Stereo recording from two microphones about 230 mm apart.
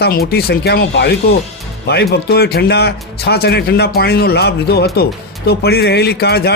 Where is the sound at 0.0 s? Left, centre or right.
Left.